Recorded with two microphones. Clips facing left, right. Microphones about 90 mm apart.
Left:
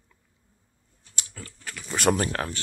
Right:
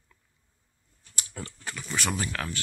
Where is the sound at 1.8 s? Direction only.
50° left (ahead or behind).